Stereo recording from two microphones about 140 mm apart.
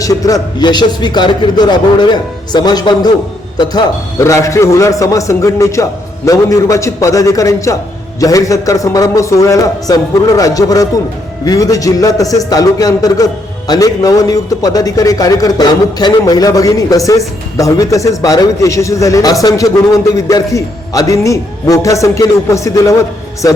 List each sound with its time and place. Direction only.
0.0 s a man's voice: 25° left (ahead or behind)